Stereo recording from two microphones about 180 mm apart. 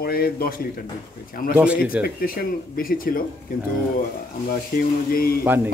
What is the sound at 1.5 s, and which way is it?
Speech, 10° right (ahead or behind).